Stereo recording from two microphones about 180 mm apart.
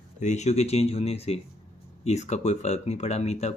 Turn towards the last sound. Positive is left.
turn(degrees=35)  # may be behind; listen again after turning